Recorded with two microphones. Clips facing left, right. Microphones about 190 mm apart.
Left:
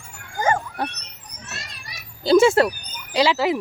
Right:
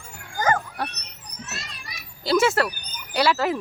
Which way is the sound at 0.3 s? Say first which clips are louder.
Left 1 dB; 25° left (ahead or behind).